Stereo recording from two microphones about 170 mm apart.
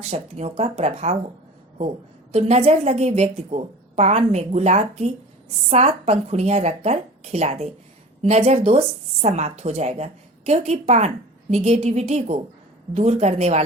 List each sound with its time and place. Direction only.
0.1 s a woman's voice: 40° right (ahead or behind)
2.3 s a woman's voice: 40° right (ahead or behind)